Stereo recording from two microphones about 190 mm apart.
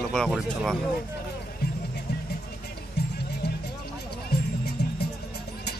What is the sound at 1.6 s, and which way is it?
Music, 55° left (ahead or behind).